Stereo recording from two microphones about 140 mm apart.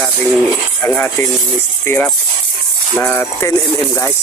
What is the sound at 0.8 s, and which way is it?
Speech, 15° left (ahead or behind).